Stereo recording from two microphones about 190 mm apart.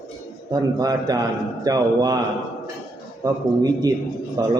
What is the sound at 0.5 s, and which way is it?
A man's voice, 20° right (ahead or behind).